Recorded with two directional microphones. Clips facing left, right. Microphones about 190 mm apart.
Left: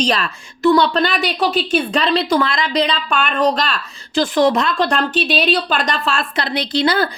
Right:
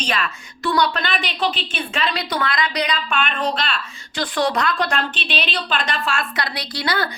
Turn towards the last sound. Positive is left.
turn(degrees=25)  # may be behind; listen again after turning